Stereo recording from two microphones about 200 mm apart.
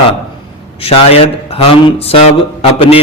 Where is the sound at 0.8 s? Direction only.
30° left (ahead or behind).